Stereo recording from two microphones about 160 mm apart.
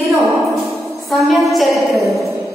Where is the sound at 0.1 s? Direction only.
20° right (ahead or behind).